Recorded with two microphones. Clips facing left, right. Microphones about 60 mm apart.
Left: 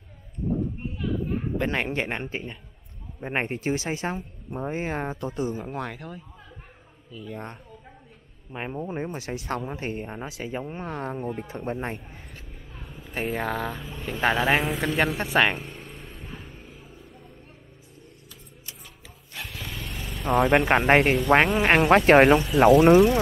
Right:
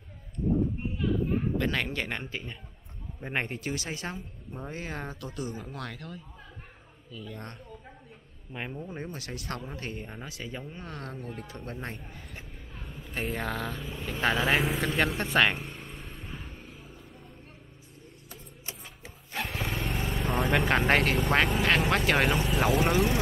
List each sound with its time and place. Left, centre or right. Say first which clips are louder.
0.9 s a sound: even; centre
1.6 s speech: left 4 dB; left
8.7 s speech: left 7 dB; left
12.7 s speech: left 3 dB; centre
15.1 s vehicle: left 3 dB; centre
18.3 s a sound: right 6 dB; right
19.9 s vehicle: right 4 dB; right
20.2 s speech: left 9 dB; centre
20.6 s speech: left 5 dB; left
22.8 s speech: left 10 dB; left